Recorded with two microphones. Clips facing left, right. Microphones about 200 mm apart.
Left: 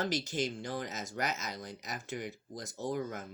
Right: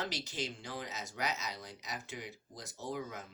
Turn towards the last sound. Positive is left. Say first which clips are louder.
# left 5 dB
turn(degrees=50)  # may be behind; listen again after turning